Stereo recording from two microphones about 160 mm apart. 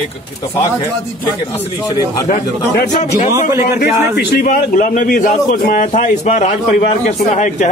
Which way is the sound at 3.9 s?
15° right (ahead or behind).